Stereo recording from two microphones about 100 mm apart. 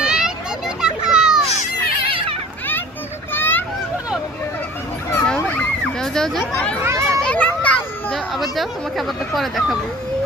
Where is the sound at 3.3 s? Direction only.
20° left (ahead or behind).